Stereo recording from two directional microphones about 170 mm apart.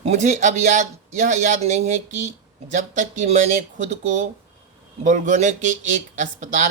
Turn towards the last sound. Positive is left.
turn(degrees=-45)  # may be behind; listen again after turning